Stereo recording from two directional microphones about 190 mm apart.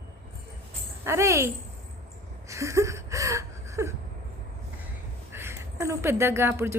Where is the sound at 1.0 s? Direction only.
15° right (ahead or behind).